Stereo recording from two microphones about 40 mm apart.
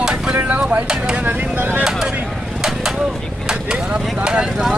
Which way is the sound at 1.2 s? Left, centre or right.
Right.